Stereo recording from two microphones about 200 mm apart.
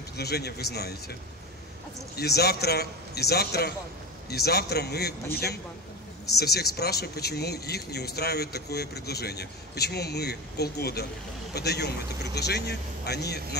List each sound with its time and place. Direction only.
0.2 s speech: 55° left (ahead or behind)
2.1 s speech: 55° left (ahead or behind)